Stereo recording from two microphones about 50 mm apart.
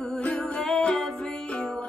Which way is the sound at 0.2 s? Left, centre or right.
Centre.